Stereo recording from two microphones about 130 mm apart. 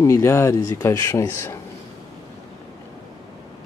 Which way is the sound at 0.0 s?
20° left (ahead or behind).